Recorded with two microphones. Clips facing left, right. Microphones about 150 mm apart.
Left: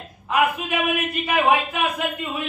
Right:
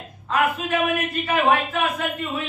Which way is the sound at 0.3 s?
15° left (ahead or behind).